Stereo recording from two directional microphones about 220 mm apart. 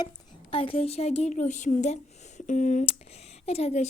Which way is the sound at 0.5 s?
25° left (ahead or behind).